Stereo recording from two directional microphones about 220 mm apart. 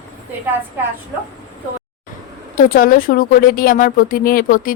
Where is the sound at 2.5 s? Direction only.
40° left (ahead or behind).